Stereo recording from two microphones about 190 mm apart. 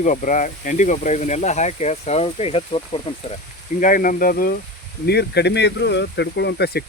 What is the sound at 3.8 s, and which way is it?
Speech, 45° left (ahead or behind).